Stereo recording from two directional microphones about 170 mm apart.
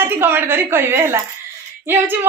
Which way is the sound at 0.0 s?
15° right (ahead or behind).